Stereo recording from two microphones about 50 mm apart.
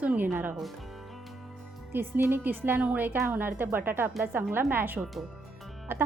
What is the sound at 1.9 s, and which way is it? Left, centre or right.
A woman's voice, right.